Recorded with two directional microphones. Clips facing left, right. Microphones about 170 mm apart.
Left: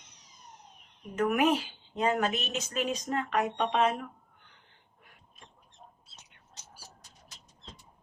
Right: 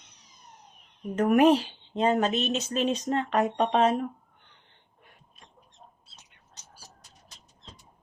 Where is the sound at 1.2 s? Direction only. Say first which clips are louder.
Right 6 dB; 45° right (ahead or behind).